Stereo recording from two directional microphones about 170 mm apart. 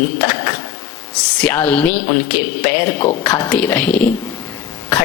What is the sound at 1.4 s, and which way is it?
Music, 10° left (ahead or behind).